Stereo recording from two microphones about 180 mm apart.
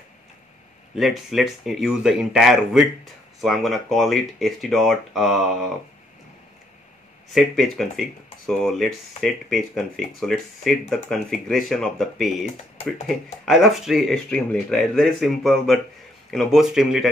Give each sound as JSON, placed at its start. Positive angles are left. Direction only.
{"t": 0.9, "sound": "speech", "side_deg": 0}
{"t": 7.3, "sound": "speech", "side_deg": 0}